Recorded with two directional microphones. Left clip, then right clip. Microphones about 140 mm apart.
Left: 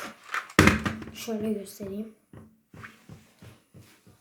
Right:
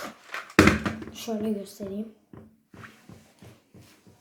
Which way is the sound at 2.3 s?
35° left (ahead or behind).